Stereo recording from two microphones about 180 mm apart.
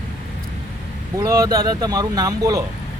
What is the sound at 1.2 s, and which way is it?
Speech, 20° right (ahead or behind).